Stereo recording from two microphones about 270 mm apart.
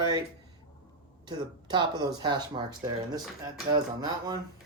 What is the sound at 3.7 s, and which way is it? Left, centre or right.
Speech, centre.